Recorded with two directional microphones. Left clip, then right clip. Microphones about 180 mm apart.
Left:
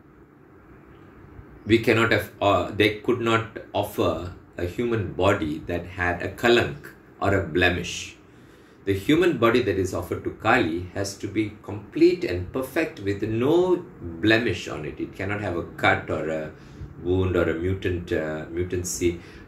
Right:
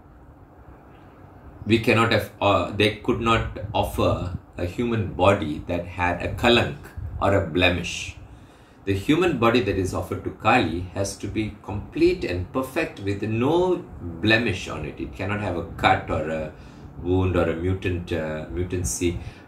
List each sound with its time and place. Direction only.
1.7 s speech: 20° right (ahead or behind)